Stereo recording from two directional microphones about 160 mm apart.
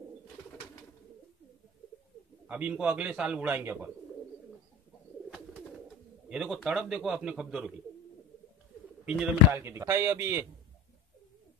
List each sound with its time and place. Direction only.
2.4 s speech: 10° right (ahead or behind)
6.2 s a man's voice: 5° right (ahead or behind)
9.0 s speech: 5° right (ahead or behind)
9.6 s speech: 15° right (ahead or behind)